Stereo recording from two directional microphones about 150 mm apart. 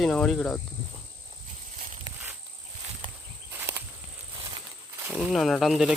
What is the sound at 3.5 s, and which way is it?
Walk, 15° right (ahead or behind).